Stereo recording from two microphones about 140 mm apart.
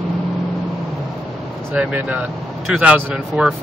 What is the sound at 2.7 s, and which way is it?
Speech, 5° right (ahead or behind).